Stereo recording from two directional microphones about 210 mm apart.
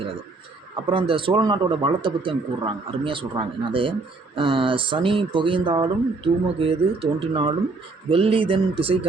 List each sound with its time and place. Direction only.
0.9 s speech: 25° right (ahead or behind)